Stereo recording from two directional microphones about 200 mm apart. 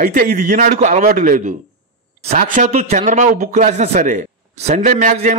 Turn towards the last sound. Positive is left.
turn(degrees=-40)  # may be behind; listen again after turning